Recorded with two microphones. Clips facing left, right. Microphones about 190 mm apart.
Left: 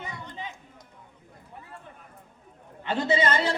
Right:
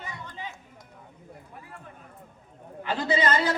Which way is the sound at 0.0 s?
20° left (ahead or behind).